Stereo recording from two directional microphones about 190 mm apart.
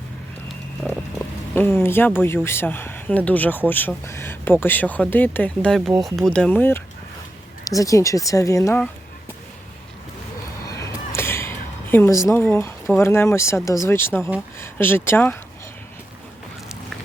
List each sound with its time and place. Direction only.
1.5 s speech: 10° left (ahead or behind)
10.7 s a sound: 15° left (ahead or behind)
12.3 s speech: 10° left (ahead or behind)